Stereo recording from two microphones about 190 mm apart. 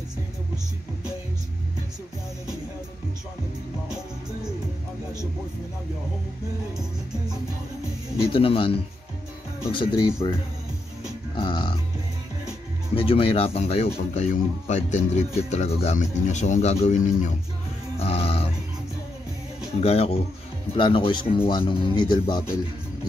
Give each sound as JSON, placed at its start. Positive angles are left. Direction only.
{"t": 8.2, "sound": "speech", "side_deg": 30}
{"t": 11.3, "sound": "music", "side_deg": 25}
{"t": 12.9, "sound": "speech", "side_deg": 30}
{"t": 19.8, "sound": "speech", "side_deg": 30}